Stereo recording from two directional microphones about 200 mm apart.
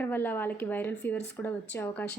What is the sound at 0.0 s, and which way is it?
A woman's voice, 10° left (ahead or behind).